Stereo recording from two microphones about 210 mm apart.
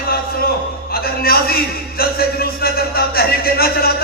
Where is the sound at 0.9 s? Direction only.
45° left (ahead or behind).